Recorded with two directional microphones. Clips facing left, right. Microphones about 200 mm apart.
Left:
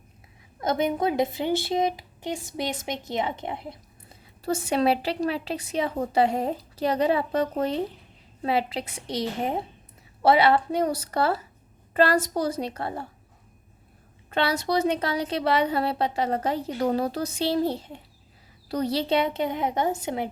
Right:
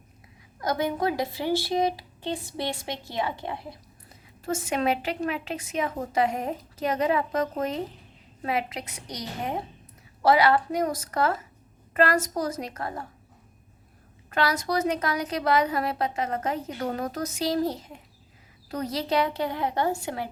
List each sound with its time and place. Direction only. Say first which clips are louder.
0.6 s a woman's voice: left 2 dB; 25° left (ahead or behind)
4.4 s a woman's voice: left 3 dB; 35° left (ahead or behind)
14.3 s a woman's voice: left 1 dB; 30° left (ahead or behind)